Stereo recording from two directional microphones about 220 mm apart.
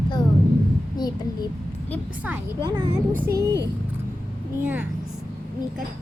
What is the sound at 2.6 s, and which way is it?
Speech, 20° right (ahead or behind).